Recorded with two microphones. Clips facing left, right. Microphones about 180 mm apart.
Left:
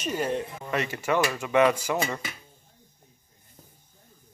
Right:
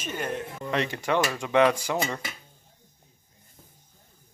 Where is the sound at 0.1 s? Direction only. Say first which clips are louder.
Left 3 dB; 5° left (ahead or behind).